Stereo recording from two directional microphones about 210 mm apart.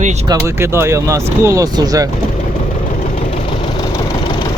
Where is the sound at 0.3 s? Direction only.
15° right (ahead or behind).